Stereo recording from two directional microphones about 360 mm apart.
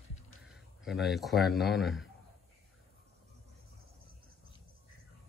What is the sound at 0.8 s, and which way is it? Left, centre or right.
Speech, centre.